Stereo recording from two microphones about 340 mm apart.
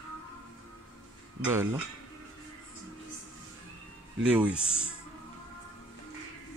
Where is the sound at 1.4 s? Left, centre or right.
Centre.